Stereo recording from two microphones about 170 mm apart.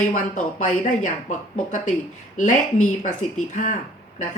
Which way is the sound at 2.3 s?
45° left (ahead or behind).